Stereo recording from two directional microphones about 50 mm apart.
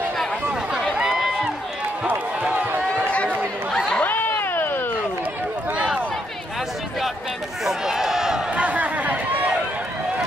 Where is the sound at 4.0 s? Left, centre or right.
Left.